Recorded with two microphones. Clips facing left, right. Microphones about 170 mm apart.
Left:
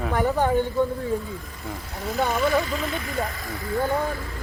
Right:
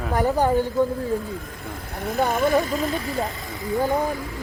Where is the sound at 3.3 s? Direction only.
20° right (ahead or behind).